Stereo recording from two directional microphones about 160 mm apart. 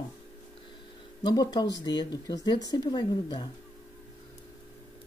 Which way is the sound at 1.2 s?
25° left (ahead or behind).